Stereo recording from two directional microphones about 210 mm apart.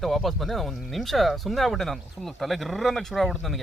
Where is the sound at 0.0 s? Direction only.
Centre (ahead or behind).